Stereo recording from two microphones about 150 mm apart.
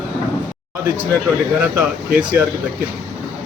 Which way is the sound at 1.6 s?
10° right (ahead or behind).